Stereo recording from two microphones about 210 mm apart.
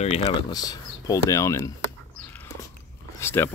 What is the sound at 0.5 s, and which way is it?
Speech, 20° left (ahead or behind).